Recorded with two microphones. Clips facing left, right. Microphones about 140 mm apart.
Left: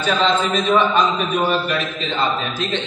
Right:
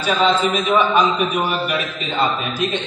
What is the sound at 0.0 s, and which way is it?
A man's voice, 10° right (ahead or behind).